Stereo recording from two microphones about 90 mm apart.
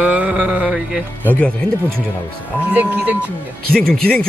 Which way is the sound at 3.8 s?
10° left (ahead or behind).